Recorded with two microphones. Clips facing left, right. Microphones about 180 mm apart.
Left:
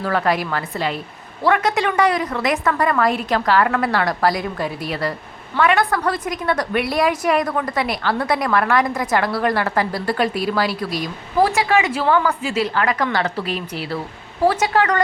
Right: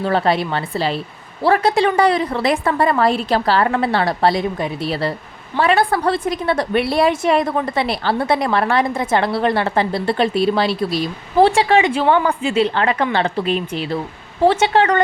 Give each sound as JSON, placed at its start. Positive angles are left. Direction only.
{"t": 0.0, "sound": "a woman's voice", "side_deg": -25}